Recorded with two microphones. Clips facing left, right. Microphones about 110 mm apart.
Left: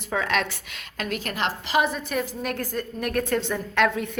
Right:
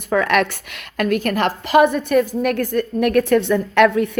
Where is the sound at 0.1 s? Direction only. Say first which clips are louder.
Right 8 dB; 60° right (ahead or behind).